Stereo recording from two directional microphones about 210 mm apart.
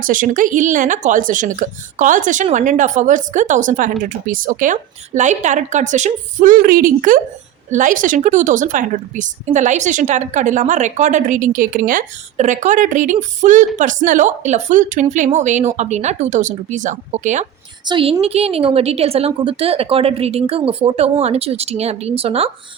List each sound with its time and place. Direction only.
0.0 s a woman's voice: 40° right (ahead or behind)